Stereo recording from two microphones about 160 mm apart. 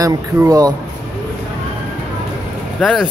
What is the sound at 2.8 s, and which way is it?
Speech, centre (ahead or behind).